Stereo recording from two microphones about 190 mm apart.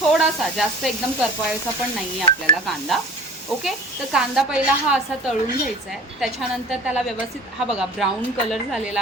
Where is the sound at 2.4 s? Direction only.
Centre (ahead or behind).